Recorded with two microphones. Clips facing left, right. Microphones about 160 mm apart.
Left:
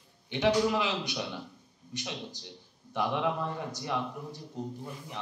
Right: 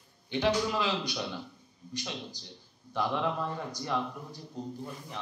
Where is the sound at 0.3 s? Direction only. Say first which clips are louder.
Left 2 dB; 20° left (ahead or behind).